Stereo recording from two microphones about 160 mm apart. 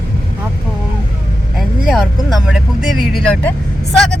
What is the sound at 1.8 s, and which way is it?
Speech, 5° right (ahead or behind).